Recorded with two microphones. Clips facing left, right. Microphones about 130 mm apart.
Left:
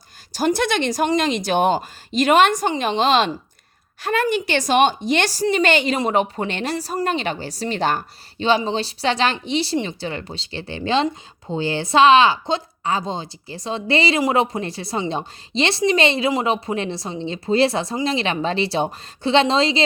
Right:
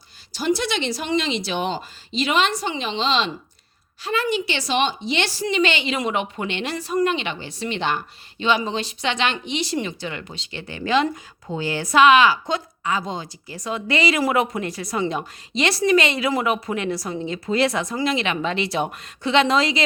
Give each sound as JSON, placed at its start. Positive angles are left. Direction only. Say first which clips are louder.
{"t": 0.3, "sound": "a woman's voice", "louder": "left 3 dB", "side_deg": 50}